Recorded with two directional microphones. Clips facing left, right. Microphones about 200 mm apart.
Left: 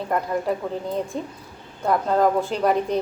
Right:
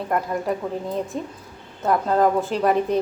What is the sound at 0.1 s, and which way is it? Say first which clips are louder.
A woman's voice: even; centre (ahead or behind).